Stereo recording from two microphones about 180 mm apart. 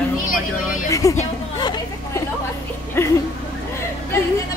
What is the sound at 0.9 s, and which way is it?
Speech, 20° left (ahead or behind).